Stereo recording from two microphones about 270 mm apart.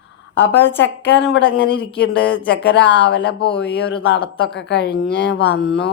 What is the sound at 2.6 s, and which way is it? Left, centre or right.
Speech, left.